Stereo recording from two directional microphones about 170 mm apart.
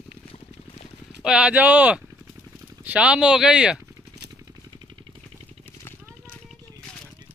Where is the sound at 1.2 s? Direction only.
5° right (ahead or behind).